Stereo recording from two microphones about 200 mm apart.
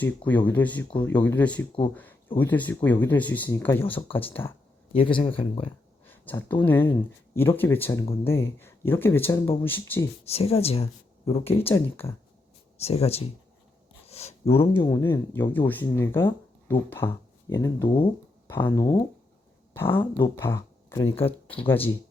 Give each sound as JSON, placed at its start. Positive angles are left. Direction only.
{"t": 0.3, "sound": "speech", "side_deg": 10}
{"t": 4.9, "sound": "speech", "side_deg": 25}
{"t": 6.1, "sound": "speech", "side_deg": 10}
{"t": 10.2, "sound": "speech", "side_deg": 30}
{"t": 12.7, "sound": "speech", "side_deg": 30}
{"t": 14.1, "sound": "a sound", "side_deg": 30}
{"t": 14.6, "sound": "speech", "side_deg": 15}
{"t": 17.8, "sound": "speech", "side_deg": 25}
{"t": 18.4, "sound": "speech", "side_deg": 10}
{"t": 21.2, "sound": "speech", "side_deg": 25}